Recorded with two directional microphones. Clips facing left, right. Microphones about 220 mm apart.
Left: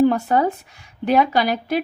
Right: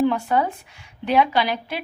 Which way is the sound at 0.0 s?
40° left (ahead or behind).